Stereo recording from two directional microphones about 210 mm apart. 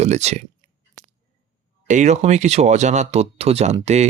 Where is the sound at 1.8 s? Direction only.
35° right (ahead or behind).